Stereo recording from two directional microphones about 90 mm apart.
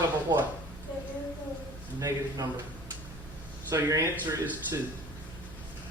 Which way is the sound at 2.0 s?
45° right (ahead or behind).